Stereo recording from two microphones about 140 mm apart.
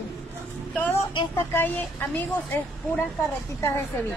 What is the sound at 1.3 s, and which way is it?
Speech, 15° left (ahead or behind).